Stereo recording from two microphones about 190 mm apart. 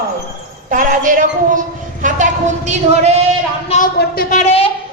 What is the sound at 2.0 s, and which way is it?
A woman's voice, 40° right (ahead or behind).